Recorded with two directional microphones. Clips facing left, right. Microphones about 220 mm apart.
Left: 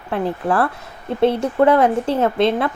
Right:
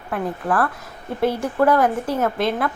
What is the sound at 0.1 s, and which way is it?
Speech, 25° left (ahead or behind).